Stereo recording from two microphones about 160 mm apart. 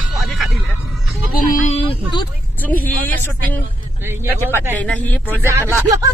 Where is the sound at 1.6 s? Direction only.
35° left (ahead or behind).